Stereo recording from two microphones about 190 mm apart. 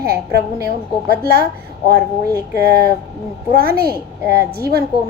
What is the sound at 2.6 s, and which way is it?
A woman's voice, 55° right (ahead or behind).